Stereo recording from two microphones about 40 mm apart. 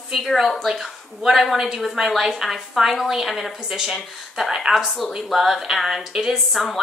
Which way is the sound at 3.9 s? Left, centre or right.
Centre.